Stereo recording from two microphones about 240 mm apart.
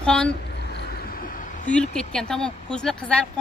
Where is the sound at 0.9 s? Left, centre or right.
Left.